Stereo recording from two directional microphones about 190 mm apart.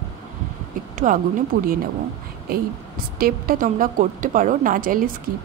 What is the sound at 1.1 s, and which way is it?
Speech, 45° right (ahead or behind).